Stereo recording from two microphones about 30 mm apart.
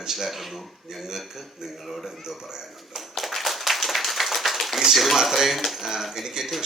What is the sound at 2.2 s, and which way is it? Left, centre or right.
Speech, centre.